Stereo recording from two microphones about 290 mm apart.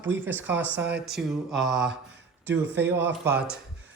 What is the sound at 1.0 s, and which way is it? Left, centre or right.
Speech, centre.